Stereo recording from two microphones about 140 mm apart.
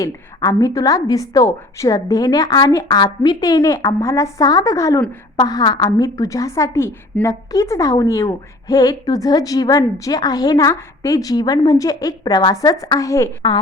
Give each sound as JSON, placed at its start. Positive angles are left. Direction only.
{"t": 0.0, "sound": "a woman's voice", "side_deg": 25}